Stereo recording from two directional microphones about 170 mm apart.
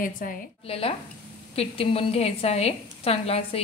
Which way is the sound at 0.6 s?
35° left (ahead or behind).